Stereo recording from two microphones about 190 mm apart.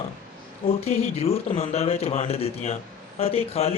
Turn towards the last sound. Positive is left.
turn(degrees=30)  # may be behind; listen again after turning